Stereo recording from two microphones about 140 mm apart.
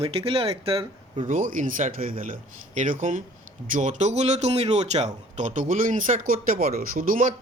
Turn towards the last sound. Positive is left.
turn(degrees=-75)  # may be behind; listen again after turning